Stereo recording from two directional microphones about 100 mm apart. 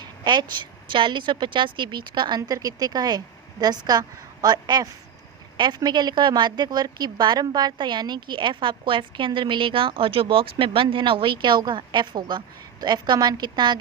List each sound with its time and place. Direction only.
0.0 s a woman's voice: 50° right (ahead or behind)